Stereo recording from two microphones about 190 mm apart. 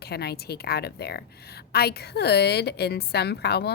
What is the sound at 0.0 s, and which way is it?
A woman's voice, 55° left (ahead or behind).